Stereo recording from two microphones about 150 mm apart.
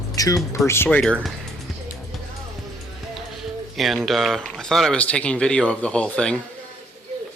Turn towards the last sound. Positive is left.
turn(degrees=5)  # may be behind; listen again after turning